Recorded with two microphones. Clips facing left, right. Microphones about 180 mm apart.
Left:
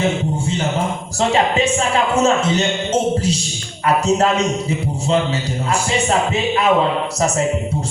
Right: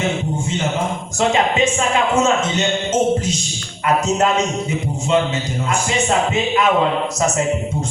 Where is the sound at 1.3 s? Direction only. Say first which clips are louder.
Left 1 dB; 35° left (ahead or behind).